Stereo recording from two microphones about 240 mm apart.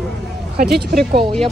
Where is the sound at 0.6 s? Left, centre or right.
Right.